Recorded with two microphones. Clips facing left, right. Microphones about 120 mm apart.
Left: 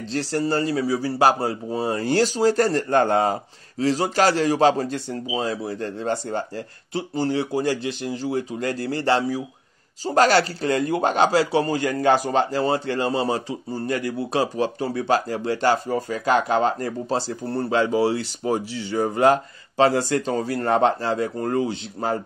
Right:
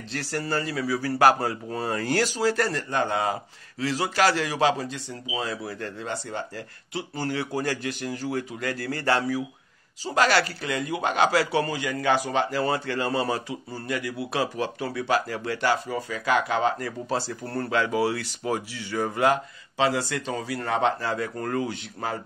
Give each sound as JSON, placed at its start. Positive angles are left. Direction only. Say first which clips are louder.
{"t": 0.1, "sound": "speech", "louder": "left 6 dB", "side_deg": 25}
{"t": 5.3, "sound": "speech", "louder": "left 4 dB", "side_deg": 30}
{"t": 10.0, "sound": "speech", "louder": "left 5 dB", "side_deg": 35}
{"t": 11.7, "sound": "speech", "louder": "left 5 dB", "side_deg": 45}
{"t": 13.8, "sound": "speech", "louder": "left 4 dB", "side_deg": 40}
{"t": 19.8, "sound": "speech", "louder": "left 6 dB", "side_deg": 40}